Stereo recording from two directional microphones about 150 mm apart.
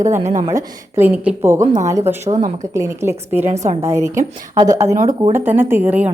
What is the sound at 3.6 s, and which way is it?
Speech, 45° right (ahead or behind).